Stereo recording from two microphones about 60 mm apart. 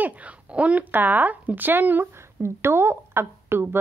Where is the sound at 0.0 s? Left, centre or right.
Right.